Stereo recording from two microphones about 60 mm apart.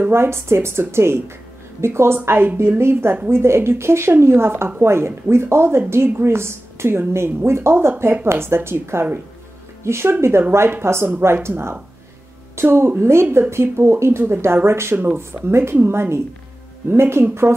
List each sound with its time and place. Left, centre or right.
0.1 s a woman's voice: right